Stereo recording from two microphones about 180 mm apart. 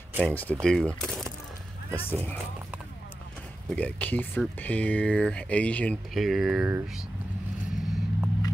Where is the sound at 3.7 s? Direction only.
10° left (ahead or behind); by 6.8 s 10° right (ahead or behind).